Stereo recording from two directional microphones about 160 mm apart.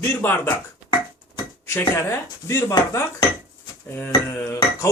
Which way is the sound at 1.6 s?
15° left (ahead or behind).